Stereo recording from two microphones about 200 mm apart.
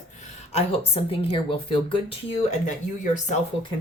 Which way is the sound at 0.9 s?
30° left (ahead or behind).